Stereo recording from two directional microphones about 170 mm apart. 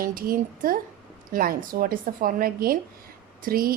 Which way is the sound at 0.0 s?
60° right (ahead or behind).